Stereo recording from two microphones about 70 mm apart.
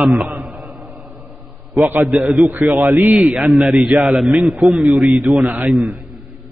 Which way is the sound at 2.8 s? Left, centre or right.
Right.